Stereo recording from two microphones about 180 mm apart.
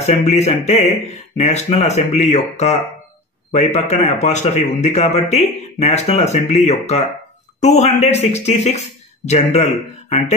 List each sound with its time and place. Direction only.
0.0 s a man's voice: 35° left (ahead or behind)